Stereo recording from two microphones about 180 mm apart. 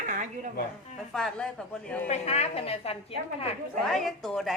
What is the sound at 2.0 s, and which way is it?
Speech, 35° left (ahead or behind).